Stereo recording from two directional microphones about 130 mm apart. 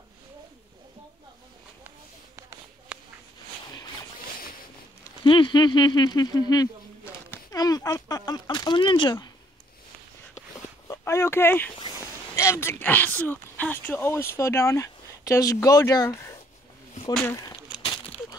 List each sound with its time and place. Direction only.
5.2 s speech: 40° left (ahead or behind)
10.9 s speech: 20° left (ahead or behind)